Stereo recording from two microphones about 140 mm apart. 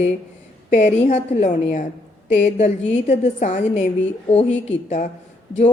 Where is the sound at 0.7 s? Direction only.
55° left (ahead or behind).